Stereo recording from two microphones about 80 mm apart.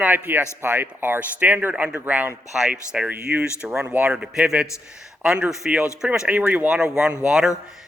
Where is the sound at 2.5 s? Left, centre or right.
Centre.